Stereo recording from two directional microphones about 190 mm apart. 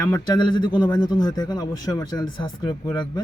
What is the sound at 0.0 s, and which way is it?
Speech, 20° left (ahead or behind).